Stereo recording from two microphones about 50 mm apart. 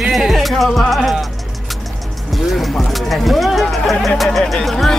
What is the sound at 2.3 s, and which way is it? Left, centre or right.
Speech, centre.